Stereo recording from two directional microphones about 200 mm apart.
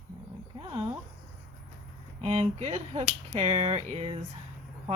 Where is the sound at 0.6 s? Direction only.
25° right (ahead or behind).